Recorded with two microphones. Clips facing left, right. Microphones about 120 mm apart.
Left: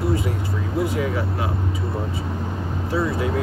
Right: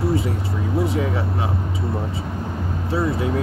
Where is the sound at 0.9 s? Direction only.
30° right (ahead or behind).